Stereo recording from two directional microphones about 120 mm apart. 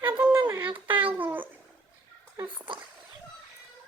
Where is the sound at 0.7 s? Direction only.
45° right (ahead or behind).